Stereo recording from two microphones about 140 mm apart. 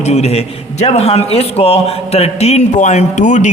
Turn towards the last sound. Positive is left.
turn(degrees=60)  # may be behind; listen again after turning